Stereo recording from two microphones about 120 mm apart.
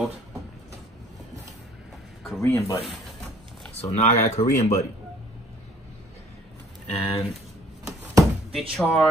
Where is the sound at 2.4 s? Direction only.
25° left (ahead or behind).